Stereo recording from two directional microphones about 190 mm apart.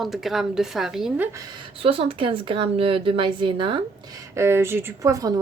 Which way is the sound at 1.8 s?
30° right (ahead or behind).